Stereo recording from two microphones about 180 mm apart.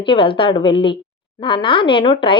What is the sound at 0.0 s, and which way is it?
Speech, 30° left (ahead or behind).